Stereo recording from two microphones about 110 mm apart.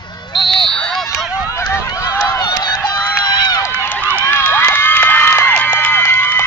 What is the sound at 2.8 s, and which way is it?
Run, 20° left (ahead or behind).